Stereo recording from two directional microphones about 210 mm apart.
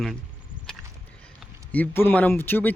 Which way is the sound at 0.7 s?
5° left (ahead or behind).